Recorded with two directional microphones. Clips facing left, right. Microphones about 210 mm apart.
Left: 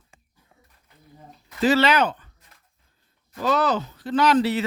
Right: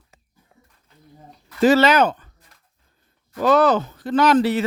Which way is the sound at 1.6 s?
45° right (ahead or behind).